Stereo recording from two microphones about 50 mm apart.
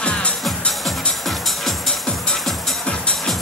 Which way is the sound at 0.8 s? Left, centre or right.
Centre.